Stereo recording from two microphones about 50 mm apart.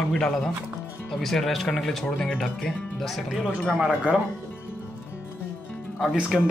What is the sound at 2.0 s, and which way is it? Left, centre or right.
Speech, centre.